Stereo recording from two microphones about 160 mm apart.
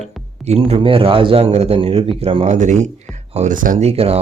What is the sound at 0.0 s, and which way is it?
A man's voice, 40° right (ahead or behind).